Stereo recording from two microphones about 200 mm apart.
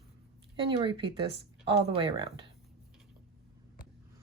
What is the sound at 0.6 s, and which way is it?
Speech, 25° right (ahead or behind).